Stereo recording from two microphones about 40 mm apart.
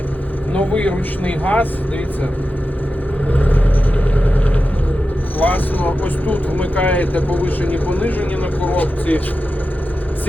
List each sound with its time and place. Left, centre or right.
0.5 s speech: left
3.3 s vehicle: left
5.4 s speech: left